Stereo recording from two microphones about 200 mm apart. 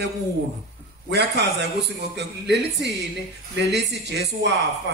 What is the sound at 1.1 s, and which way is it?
Speech, 55° right (ahead or behind).